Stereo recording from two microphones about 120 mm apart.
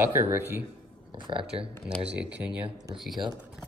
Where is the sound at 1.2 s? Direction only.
45° right (ahead or behind).